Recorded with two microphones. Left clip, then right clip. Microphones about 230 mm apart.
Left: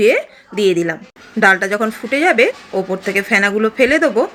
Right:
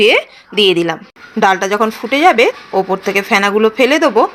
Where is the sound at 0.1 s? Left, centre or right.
Centre.